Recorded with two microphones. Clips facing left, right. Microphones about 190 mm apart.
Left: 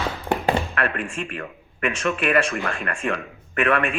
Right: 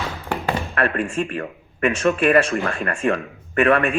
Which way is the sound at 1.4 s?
35° right (ahead or behind).